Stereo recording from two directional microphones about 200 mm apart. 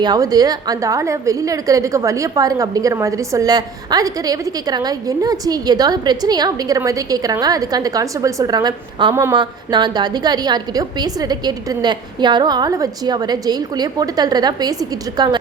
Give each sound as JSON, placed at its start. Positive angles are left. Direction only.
{"t": 0.0, "sound": "a woman's voice", "side_deg": -20}